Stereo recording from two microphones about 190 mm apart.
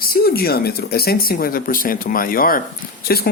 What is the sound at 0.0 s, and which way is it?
Speech, 50° left (ahead or behind).